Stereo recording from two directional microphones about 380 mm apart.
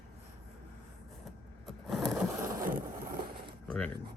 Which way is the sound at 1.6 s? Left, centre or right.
Centre.